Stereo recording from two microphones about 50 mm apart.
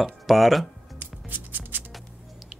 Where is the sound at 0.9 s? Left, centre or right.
Right.